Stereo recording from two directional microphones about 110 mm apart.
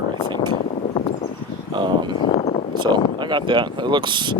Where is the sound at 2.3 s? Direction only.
75° left (ahead or behind).